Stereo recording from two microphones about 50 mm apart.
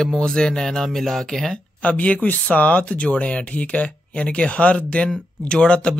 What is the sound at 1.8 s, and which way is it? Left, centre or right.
Speech, left.